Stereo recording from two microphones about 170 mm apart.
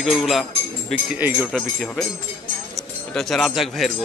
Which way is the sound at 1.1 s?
10° right (ahead or behind).